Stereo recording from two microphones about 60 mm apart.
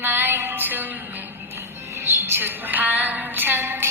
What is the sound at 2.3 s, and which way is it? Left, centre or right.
Music, right.